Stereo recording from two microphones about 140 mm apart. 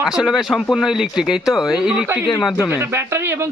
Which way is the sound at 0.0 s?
5° right (ahead or behind).